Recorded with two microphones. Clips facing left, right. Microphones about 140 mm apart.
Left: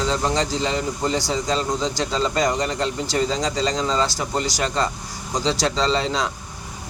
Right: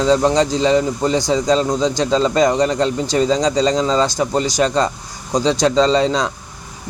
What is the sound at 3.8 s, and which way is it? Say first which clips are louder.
Speech: right 6 dB; 20° right (ahead or behind).